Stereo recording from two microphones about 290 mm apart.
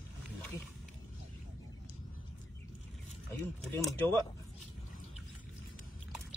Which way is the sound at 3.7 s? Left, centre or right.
Centre.